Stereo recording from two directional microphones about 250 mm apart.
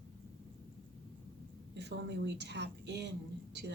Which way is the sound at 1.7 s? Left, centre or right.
Right.